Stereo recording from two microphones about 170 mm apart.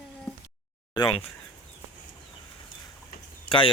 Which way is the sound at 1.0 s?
25° left (ahead or behind).